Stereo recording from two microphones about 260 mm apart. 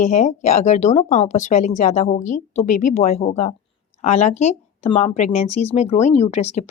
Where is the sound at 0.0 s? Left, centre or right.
Left.